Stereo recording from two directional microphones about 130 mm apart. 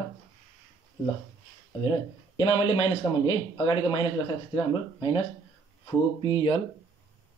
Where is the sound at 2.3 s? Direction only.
45° left (ahead or behind).